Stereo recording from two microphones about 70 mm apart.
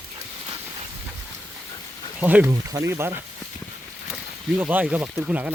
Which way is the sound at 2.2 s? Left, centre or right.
Right.